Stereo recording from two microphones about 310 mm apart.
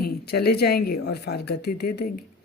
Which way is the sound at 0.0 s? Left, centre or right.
Left.